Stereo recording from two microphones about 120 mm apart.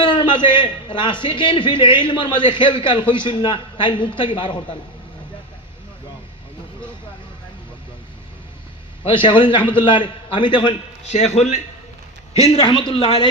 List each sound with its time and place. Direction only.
0.0 s a sound: 40° left (ahead or behind)
0.5 s a man's voice: 40° left (ahead or behind)
9.0 s a man's voice: 40° left (ahead or behind)
11.1 s a man's voice: 65° left (ahead or behind)